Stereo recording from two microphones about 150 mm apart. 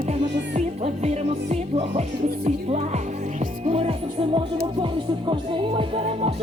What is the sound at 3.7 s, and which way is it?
Music, 40° right (ahead or behind).